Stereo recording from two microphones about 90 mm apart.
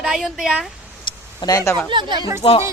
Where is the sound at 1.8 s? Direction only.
60° right (ahead or behind).